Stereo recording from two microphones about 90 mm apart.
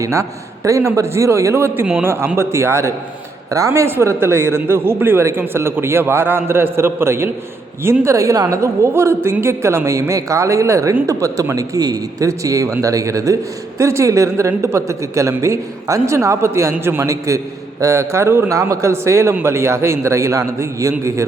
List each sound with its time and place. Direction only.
0.0 s speech: 35° right (ahead or behind)